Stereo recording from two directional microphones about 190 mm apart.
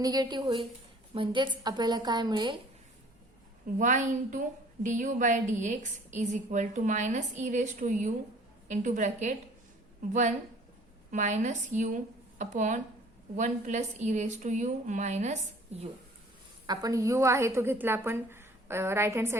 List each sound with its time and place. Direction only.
0.0 s a woman's voice: 20° right (ahead or behind)
3.8 s a woman's voice: 40° right (ahead or behind)
16.6 s a woman's voice: 20° right (ahead or behind)